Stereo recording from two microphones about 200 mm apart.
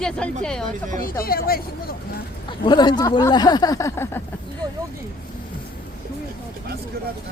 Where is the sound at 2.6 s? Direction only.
20° left (ahead or behind).